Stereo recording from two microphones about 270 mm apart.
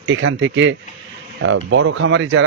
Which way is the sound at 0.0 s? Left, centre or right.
Right.